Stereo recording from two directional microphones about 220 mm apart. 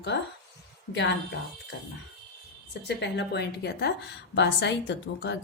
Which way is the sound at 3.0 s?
50° left (ahead or behind).